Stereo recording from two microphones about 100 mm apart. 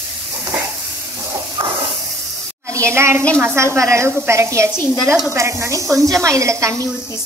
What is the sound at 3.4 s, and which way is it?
A woman's voice, 25° right (ahead or behind).